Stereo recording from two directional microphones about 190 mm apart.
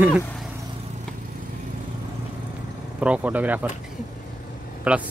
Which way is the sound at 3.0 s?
5° right (ahead or behind).